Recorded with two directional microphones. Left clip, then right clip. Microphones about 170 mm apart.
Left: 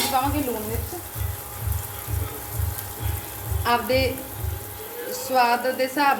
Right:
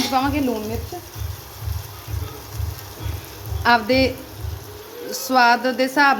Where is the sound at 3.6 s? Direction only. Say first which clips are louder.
Right 5 dB; 70° right (ahead or behind).